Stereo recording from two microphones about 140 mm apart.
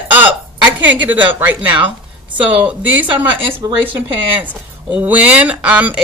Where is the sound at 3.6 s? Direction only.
25° right (ahead or behind).